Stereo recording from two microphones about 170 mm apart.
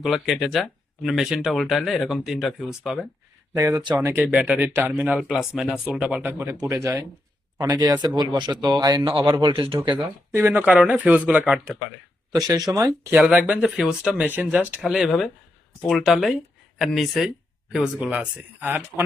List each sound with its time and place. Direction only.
0.0 s speech: centre (ahead or behind)
3.5 s speech: 15° right (ahead or behind)
4.1 s speech: 10° right (ahead or behind); by 10.0 s 30° right (ahead or behind)
10.3 s speech: 10° right (ahead or behind)
12.3 s speech: 20° right (ahead or behind)